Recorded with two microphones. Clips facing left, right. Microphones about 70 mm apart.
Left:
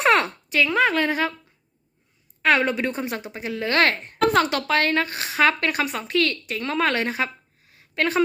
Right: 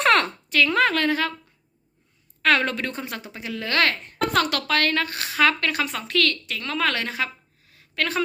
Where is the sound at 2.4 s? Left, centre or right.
Centre.